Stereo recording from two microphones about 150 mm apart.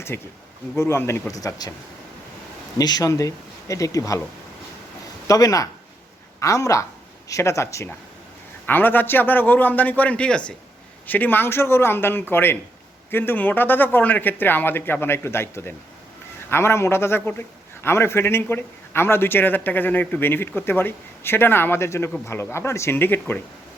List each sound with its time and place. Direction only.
0.1 s speech: 15° left (ahead or behind)
2.7 s speech: 25° left (ahead or behind)
5.3 s speech: 25° left (ahead or behind)